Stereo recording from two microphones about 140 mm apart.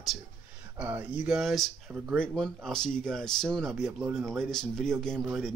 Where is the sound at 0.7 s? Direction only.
10° right (ahead or behind); by 5.3 s 5° left (ahead or behind).